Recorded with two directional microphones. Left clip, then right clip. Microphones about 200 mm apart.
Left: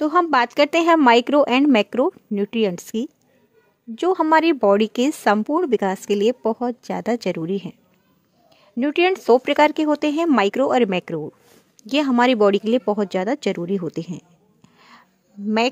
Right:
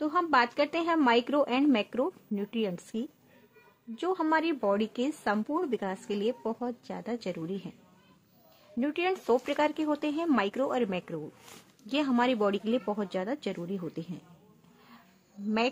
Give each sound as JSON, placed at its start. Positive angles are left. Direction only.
{"t": 0.0, "sound": "speech", "side_deg": 45}
{"t": 8.7, "sound": "speech", "side_deg": 40}